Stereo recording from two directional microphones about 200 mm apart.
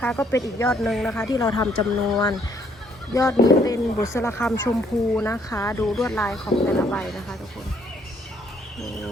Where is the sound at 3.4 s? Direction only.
15° left (ahead or behind).